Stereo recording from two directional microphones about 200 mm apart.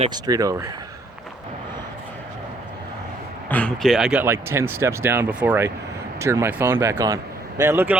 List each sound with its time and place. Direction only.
0.0 s speech: 20° right (ahead or behind)
3.5 s speech: 5° left (ahead or behind); by 7.9 s 10° right (ahead or behind)